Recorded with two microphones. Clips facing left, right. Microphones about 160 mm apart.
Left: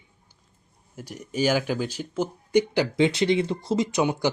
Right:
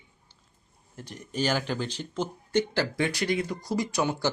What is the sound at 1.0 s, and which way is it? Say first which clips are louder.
Speech: left 4 dB; 10° left (ahead or behind).